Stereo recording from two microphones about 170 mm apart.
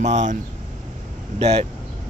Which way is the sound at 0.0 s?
45° right (ahead or behind).